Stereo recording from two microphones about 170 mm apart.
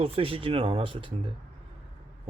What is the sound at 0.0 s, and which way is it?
Speech, 35° right (ahead or behind).